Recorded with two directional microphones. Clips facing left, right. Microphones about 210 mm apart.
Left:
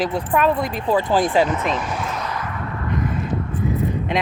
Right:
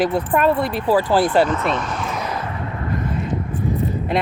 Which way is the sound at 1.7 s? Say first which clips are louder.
Right 1 dB; 5° left (ahead or behind).